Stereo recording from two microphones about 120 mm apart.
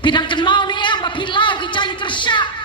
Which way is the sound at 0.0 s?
40° left (ahead or behind).